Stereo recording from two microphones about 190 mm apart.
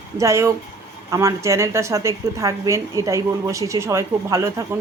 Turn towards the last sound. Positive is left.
turn(degrees=-15)  # may be behind; listen again after turning